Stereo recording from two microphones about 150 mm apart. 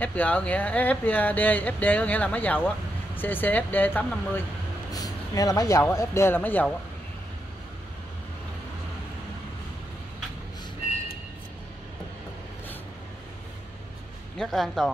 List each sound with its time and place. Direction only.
0.0 s speech: 10° left (ahead or behind)
4.9 s speech: 25° left (ahead or behind)
14.4 s speech: centre (ahead or behind)